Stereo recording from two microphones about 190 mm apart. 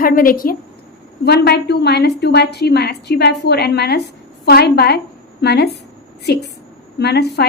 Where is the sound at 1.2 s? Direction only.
60° left (ahead or behind).